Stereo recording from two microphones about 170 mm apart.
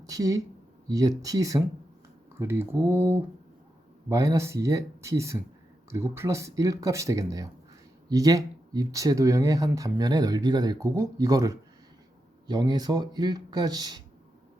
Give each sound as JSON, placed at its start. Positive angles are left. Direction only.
{"t": 0.0, "sound": "speech", "side_deg": -20}